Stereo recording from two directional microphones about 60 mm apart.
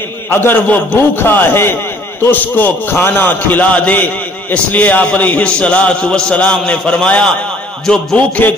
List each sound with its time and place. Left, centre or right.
0.3 s a man's voice: left
2.3 s a man's voice: left
7.8 s a man's voice: centre